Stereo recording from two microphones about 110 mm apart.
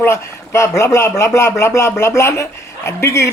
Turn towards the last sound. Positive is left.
turn(degrees=25)  # may be behind; listen again after turning